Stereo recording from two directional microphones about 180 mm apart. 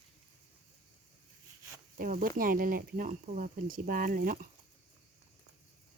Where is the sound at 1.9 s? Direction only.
50° right (ahead or behind).